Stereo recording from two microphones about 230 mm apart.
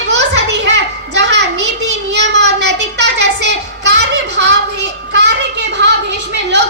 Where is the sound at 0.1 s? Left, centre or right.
Right.